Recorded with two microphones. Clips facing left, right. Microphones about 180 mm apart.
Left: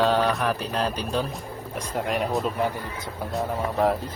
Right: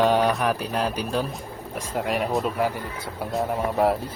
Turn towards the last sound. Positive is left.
turn(degrees=-10)  # may be behind; listen again after turning